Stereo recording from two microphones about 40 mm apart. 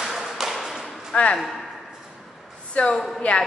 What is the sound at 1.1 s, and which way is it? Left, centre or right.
Speech, left.